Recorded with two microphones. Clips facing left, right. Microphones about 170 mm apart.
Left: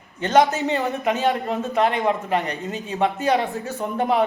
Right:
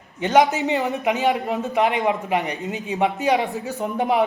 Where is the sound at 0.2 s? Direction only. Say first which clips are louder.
Even; 15° right (ahead or behind).